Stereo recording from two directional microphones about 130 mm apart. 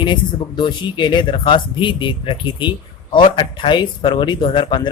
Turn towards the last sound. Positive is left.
turn(degrees=35)  # may be behind; listen again after turning